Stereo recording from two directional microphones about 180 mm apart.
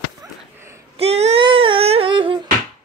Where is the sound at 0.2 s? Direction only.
15° right (ahead or behind).